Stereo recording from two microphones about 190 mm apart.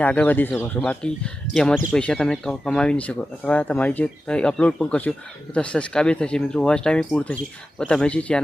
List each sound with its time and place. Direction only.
0.0 s speech: 5° left (ahead or behind)